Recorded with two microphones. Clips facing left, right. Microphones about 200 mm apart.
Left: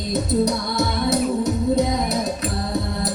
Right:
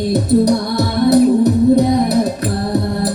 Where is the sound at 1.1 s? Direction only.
65° right (ahead or behind).